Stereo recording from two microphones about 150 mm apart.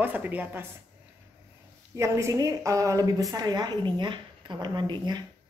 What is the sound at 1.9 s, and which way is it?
A woman's voice, 20° right (ahead or behind).